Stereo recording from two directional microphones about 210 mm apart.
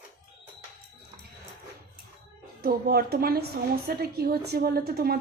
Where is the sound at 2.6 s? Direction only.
45° right (ahead or behind).